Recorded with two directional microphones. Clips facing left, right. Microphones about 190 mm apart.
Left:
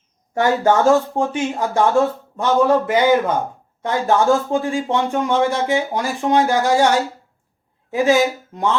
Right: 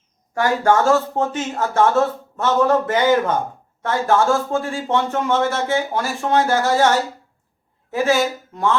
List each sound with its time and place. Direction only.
0.3 s speech: 20° left (ahead or behind)